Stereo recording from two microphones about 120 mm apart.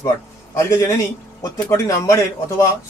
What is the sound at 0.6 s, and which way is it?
Speech, 20° left (ahead or behind).